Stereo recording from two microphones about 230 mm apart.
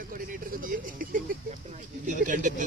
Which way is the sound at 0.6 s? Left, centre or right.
Right.